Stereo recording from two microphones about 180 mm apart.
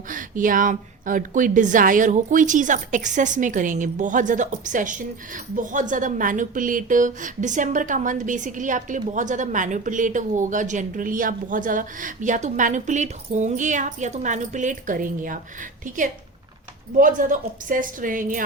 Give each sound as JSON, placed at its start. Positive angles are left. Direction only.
{"t": 0.1, "sound": "a woman's voice", "side_deg": -50}
{"t": 17.0, "sound": "a woman's voice", "side_deg": -50}